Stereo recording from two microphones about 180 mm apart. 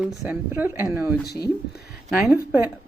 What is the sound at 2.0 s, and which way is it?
Speech, centre (ahead or behind).